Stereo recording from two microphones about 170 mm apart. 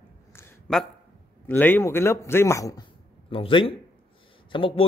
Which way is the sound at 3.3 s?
30° left (ahead or behind).